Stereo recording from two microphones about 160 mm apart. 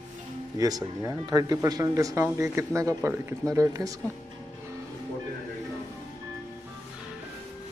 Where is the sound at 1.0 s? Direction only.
20° right (ahead or behind).